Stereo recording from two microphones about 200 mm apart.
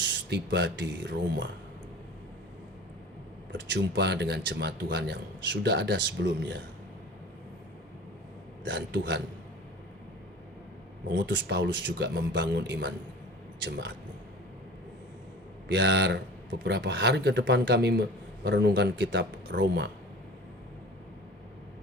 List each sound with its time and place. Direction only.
0.0 s speech: 60° right (ahead or behind)
3.5 s a man's voice: 60° right (ahead or behind)
8.6 s a man's voice: 65° right (ahead or behind)
11.1 s a man's voice: 60° right (ahead or behind)
15.7 s a man's voice: 60° right (ahead or behind)